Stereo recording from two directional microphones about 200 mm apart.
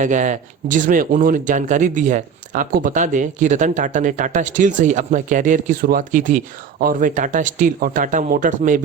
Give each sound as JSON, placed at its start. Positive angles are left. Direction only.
{"t": 0.0, "sound": "speech", "side_deg": -40}